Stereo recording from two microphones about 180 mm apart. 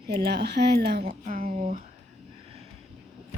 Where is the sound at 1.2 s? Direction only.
50° right (ahead or behind).